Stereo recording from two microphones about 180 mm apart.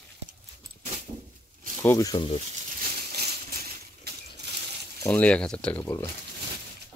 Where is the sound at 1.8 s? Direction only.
20° left (ahead or behind).